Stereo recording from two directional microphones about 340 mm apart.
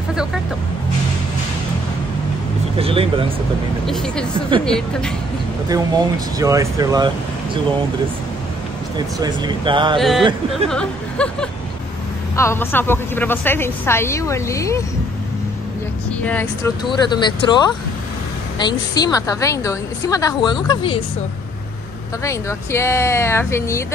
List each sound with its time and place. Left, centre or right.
0.1 s vehicle: centre
2.8 s speech: centre
3.8 s speech: centre
5.7 s speech: centre
8.9 s speech: centre
9.9 s speech: centre
16.3 s speech: centre
22.2 s speech: centre